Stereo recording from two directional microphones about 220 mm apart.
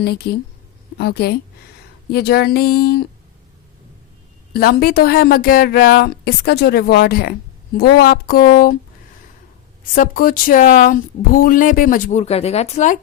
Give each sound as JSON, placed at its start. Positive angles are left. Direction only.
{"t": 0.0, "sound": "speech", "side_deg": 45}
{"t": 4.5, "sound": "speech", "side_deg": 45}
{"t": 9.9, "sound": "speech", "side_deg": 40}